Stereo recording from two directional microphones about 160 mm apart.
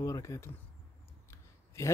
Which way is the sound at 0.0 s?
20° left (ahead or behind).